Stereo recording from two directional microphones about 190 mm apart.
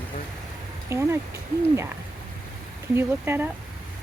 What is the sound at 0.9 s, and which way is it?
Speech, 15° right (ahead or behind).